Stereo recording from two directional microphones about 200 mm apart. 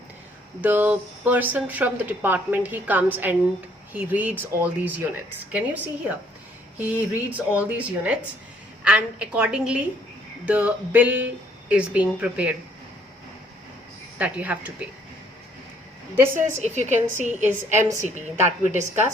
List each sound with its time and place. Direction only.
0.6 s a woman's voice: 10° right (ahead or behind)
14.2 s speech: 5° right (ahead or behind)
16.1 s speech: 10° right (ahead or behind)
16.6 s a woman's voice: 35° right (ahead or behind)
17.4 s speech: 10° right (ahead or behind)